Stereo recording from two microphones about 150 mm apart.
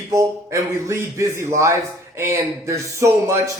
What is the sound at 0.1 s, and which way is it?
Speech, 20° right (ahead or behind).